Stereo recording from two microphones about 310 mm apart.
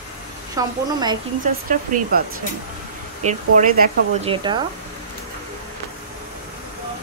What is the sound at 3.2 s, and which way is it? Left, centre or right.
Speech, right.